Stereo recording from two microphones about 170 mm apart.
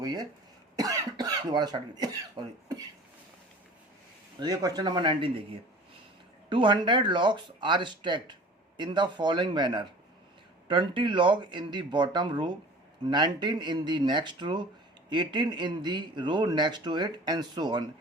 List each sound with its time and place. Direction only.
0.0 s speech: 20° right (ahead or behind)
4.4 s speech: 20° right (ahead or behind)
6.5 s speech: 30° right (ahead or behind)